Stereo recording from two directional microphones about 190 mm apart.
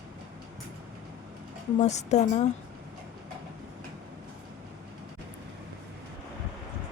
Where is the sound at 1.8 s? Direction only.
35° left (ahead or behind).